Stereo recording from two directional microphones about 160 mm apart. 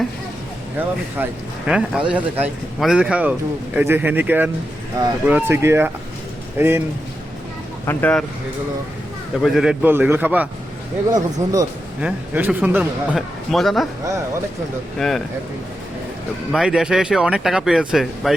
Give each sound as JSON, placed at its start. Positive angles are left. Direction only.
{"t": 0.8, "sound": "speech", "side_deg": -10}
{"t": 7.9, "sound": "speech", "side_deg": 10}
{"t": 9.4, "sound": "speech", "side_deg": -5}
{"t": 11.1, "sound": "speech", "side_deg": -20}
{"t": 11.9, "sound": "speech", "side_deg": -10}
{"t": 14.9, "sound": "speech", "side_deg": 0}
{"t": 16.5, "sound": "speech", "side_deg": -5}